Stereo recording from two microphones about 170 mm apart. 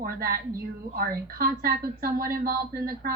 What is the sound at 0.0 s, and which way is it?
A woman's voice, 60° right (ahead or behind).